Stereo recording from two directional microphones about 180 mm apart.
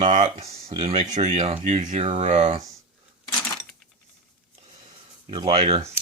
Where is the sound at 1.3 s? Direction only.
35° right (ahead or behind).